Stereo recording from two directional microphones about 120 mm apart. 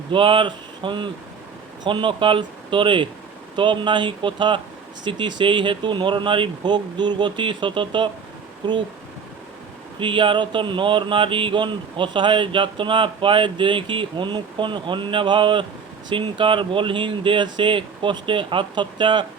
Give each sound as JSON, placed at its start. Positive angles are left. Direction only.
{"t": 0.1, "sound": "speech", "side_deg": -45}
{"t": 10.0, "sound": "speech", "side_deg": -45}